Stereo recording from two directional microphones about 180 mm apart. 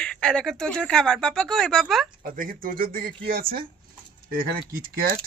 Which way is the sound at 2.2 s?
50° right (ahead or behind).